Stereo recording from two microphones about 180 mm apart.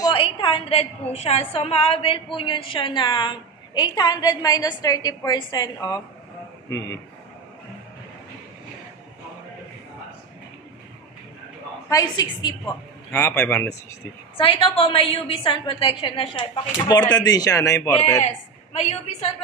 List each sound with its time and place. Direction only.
0.0 s a woman's voice: 30° left (ahead or behind)
11.9 s a woman's voice: 20° left (ahead or behind)
13.1 s a man's voice: 10° left (ahead or behind)
14.3 s a woman's voice: 30° left (ahead or behind)
18.7 s a woman's voice: 35° left (ahead or behind)